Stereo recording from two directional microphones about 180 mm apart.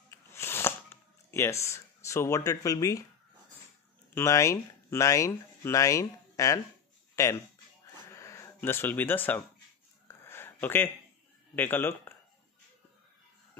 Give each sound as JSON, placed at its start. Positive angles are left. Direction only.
{"t": 0.1, "sound": "a sound", "side_deg": 15}
{"t": 1.3, "sound": "speech", "side_deg": 15}
{"t": 4.1, "sound": "speech", "side_deg": 15}
{"t": 7.8, "sound": "music", "side_deg": 15}
{"t": 10.0, "sound": "a sound", "side_deg": 10}
{"t": 11.5, "sound": "speech", "side_deg": 10}